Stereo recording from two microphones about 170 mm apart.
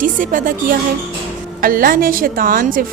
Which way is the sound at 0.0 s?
50° right (ahead or behind).